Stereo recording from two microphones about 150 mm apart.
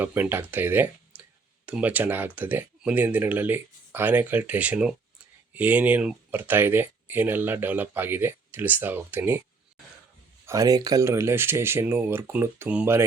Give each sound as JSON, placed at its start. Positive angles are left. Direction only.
{"t": 0.0, "sound": "speech", "side_deg": -15}
{"t": 10.4, "sound": "speech", "side_deg": -20}